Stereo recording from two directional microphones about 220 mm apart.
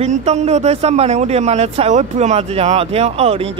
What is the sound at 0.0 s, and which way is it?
Speech, 30° right (ahead or behind).